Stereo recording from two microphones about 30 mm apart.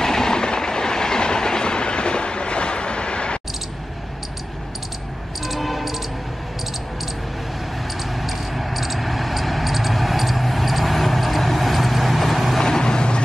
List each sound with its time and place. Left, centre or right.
0.0 s train: centre; by 3.3 s left
5.5 s music: centre
8.2 s a sound: centre
12.5 s vehicle: left